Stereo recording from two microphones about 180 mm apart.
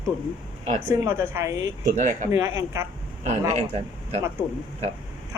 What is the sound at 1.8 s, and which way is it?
Speech, 45° right (ahead or behind).